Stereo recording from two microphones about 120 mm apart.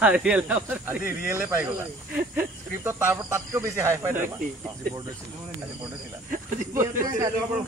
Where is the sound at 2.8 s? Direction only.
20° right (ahead or behind).